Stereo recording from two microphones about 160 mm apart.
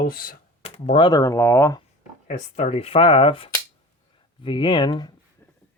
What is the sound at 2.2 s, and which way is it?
Speech, 50° left (ahead or behind).